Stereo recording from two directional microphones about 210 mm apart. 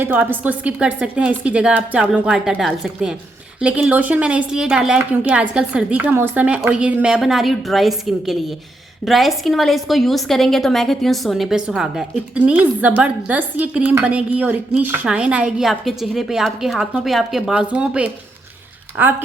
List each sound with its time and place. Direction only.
0.0 s a woman's voice: 10° right (ahead or behind)